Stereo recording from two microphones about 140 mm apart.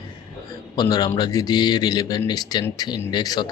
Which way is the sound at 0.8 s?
25° left (ahead or behind).